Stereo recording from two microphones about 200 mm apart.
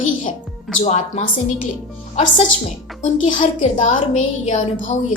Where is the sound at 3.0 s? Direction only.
35° left (ahead or behind).